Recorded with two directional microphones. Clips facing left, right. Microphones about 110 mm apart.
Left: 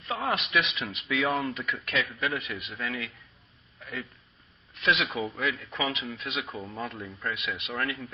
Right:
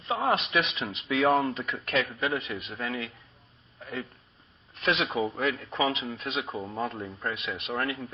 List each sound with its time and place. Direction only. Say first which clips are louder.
0.0 s speech: right 3 dB; 25° right (ahead or behind)
3.8 s a sound: right 2 dB; 35° right (ahead or behind)
4.7 s speech: even; 35° right (ahead or behind)